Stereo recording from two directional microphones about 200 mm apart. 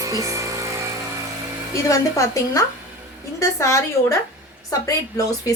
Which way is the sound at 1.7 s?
15° left (ahead or behind).